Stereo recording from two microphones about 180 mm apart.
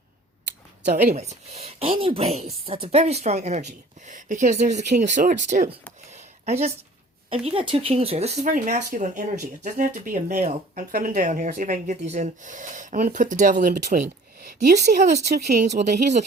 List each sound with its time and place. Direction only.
0.8 s speech: 60° right (ahead or behind)
1.1 s a woman's voice: 40° right (ahead or behind)
6.1 s a sound: 40° right (ahead or behind)
7.4 s a woman's voice: 30° right (ahead or behind)